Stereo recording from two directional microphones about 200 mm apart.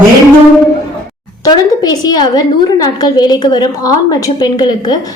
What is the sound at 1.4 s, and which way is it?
A woman's voice, 20° left (ahead or behind).